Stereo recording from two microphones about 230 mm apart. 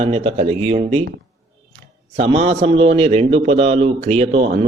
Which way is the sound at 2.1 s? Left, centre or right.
Right.